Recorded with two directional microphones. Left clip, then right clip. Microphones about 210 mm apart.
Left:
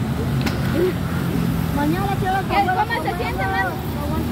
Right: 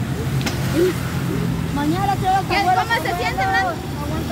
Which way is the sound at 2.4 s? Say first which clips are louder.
Right 1 dB; 55° right (ahead or behind).